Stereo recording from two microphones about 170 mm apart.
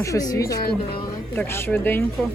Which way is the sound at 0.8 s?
30° left (ahead or behind).